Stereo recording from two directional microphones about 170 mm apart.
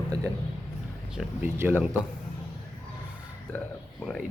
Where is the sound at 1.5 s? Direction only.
10° right (ahead or behind).